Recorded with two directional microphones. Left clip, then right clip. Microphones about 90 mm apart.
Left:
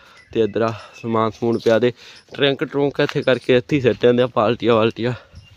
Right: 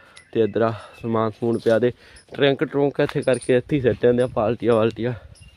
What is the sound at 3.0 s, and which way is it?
Speech, 30° left (ahead or behind).